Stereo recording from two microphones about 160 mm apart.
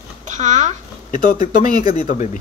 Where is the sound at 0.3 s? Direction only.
50° right (ahead or behind).